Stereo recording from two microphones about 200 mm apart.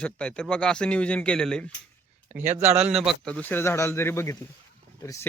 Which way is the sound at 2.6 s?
35° right (ahead or behind).